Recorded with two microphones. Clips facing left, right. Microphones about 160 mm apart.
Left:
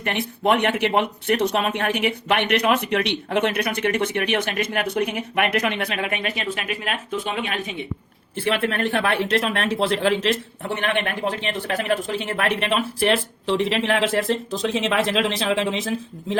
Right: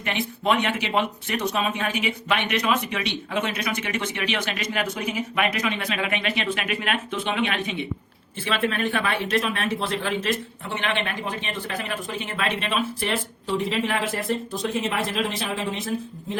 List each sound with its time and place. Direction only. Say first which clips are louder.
0.0 s speech: left 3 dB; 55° left (ahead or behind); by 7.8 s 40° left (ahead or behind)
8.4 s speech: left 3 dB; 60° left (ahead or behind); by 16.4 s 90° left